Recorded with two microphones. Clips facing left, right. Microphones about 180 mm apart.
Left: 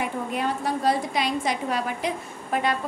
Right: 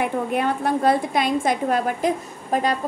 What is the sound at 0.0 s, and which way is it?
A woman's voice, 55° right (ahead or behind).